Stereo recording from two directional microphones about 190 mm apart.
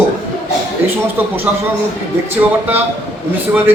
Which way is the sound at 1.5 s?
10° right (ahead or behind).